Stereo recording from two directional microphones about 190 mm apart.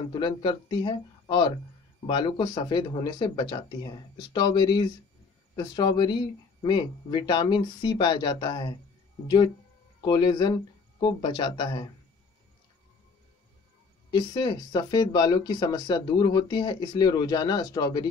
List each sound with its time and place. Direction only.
0.1 s speech: 25° left (ahead or behind)
10.0 s speech: 25° left (ahead or behind)
14.1 s speech: 25° left (ahead or behind)